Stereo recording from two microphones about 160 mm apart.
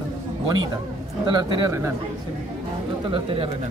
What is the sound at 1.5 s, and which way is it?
Speech, 20° right (ahead or behind).